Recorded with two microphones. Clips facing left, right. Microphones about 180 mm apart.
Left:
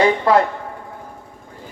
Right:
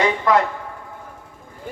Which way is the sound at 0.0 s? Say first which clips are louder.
Left 3 dB; 30° left (ahead or behind).